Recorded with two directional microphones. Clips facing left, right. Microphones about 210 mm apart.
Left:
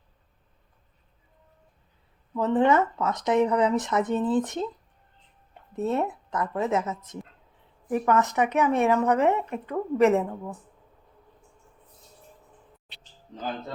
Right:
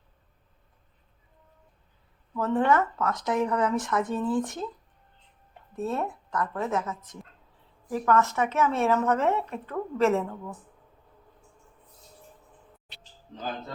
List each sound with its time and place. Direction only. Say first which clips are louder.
2.3 s speech: left 2 dB; 20° left (ahead or behind)
5.7 s speech: left 4 dB; 20° left (ahead or behind)